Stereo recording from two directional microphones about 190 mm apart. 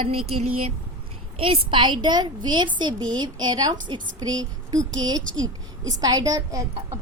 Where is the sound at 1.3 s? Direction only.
30° right (ahead or behind).